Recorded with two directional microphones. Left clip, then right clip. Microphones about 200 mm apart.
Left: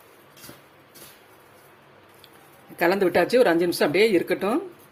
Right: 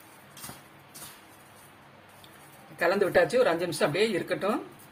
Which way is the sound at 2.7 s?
40° left (ahead or behind).